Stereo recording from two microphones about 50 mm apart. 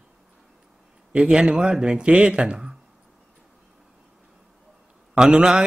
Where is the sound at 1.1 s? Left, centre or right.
Right.